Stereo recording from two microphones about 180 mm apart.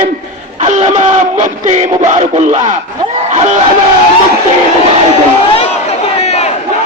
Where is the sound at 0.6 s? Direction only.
40° right (ahead or behind).